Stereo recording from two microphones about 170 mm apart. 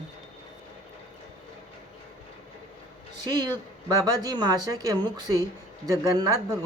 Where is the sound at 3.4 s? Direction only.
25° right (ahead or behind).